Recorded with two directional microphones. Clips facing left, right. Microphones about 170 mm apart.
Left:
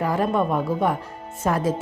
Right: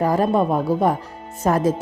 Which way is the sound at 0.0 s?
40° right (ahead or behind).